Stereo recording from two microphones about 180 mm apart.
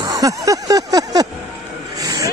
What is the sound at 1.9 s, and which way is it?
Vehicle, 20° right (ahead or behind).